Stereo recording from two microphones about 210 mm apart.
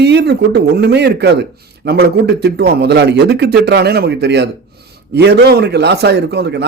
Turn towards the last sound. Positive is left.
turn(degrees=-55)  # may be behind; listen again after turning